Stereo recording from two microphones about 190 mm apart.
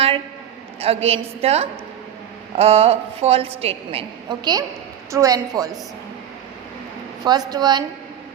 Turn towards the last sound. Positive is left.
turn(degrees=-20)  # may be behind; listen again after turning